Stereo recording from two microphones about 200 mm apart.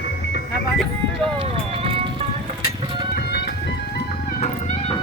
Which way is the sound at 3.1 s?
55° left (ahead or behind).